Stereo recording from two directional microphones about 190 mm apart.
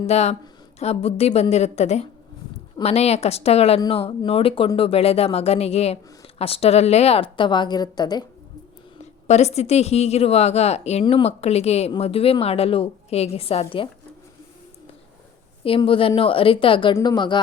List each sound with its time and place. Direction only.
0.1 s a woman's voice: 35° left (ahead or behind)
9.2 s speech: 35° left (ahead or behind)
15.6 s a woman's voice: 30° left (ahead or behind)